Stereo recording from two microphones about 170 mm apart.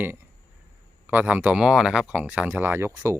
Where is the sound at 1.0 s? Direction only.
10° right (ahead or behind).